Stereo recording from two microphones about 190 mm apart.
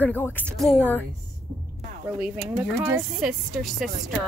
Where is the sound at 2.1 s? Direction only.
10° right (ahead or behind).